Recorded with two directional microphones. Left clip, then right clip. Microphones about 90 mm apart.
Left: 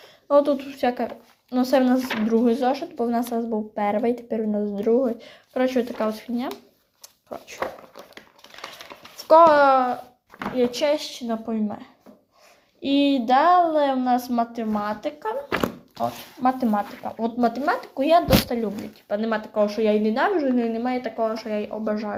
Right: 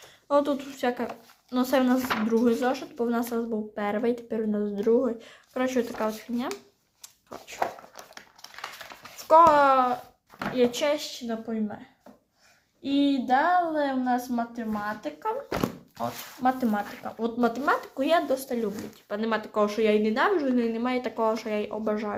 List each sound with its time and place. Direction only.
0.3 s speech: 10° left (ahead or behind)
5.2 s speech: 20° left (ahead or behind)
7.3 s crumpling: 15° left (ahead or behind)
9.1 s a child's voice: 20° left (ahead or behind)
12.8 s a woman's voice: 65° left (ahead or behind)
15.2 s thunk: 35° left (ahead or behind)
16.0 s speech: 15° left (ahead or behind)
20.2 s speech: centre (ahead or behind)
21.5 s speech: 10° left (ahead or behind)